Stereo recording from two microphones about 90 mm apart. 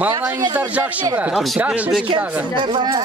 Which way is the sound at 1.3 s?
Centre (ahead or behind).